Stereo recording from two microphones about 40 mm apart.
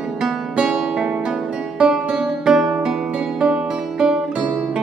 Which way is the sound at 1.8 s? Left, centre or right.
Right.